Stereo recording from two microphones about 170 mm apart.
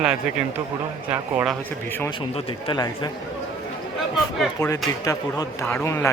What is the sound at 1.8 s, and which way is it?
Speech, 10° left (ahead or behind).